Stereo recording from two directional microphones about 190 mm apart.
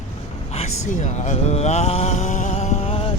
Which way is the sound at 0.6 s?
35° left (ahead or behind).